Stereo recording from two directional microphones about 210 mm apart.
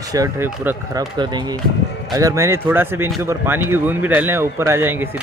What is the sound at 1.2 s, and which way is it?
A man's voice, 20° right (ahead or behind).